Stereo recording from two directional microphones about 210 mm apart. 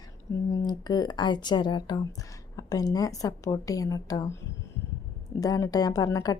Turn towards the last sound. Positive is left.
turn(degrees=15)  # may be behind; listen again after turning